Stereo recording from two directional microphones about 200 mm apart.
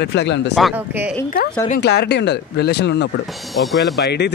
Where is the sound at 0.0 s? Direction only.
60° left (ahead or behind).